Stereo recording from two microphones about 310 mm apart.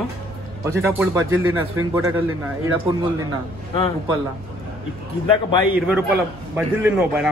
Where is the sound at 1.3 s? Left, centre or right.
Right.